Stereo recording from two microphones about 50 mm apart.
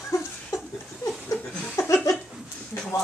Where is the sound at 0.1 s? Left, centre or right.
Left.